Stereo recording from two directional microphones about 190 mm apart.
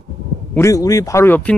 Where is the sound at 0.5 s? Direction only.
15° left (ahead or behind).